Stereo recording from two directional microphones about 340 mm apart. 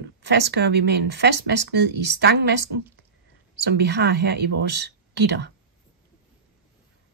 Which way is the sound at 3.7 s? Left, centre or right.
Right.